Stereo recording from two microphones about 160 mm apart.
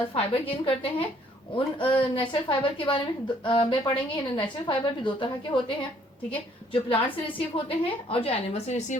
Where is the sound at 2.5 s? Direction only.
30° left (ahead or behind).